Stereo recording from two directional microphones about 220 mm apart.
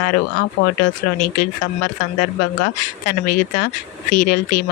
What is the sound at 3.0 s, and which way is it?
Speech, 40° left (ahead or behind).